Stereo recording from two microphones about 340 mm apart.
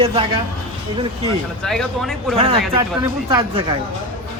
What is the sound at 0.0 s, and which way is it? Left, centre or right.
Speech, centre.